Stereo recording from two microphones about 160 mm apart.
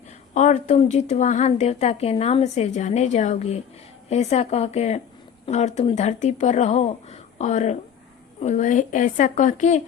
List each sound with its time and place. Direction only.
0.3 s a woman's voice: 50° left (ahead or behind)